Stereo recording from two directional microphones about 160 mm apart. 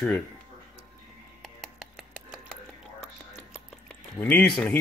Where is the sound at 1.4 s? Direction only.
Centre (ahead or behind).